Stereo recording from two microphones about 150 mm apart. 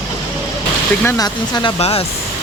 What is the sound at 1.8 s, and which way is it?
Speech, 40° left (ahead or behind).